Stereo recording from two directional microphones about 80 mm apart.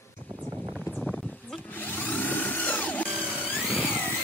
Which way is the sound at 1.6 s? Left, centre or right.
Left.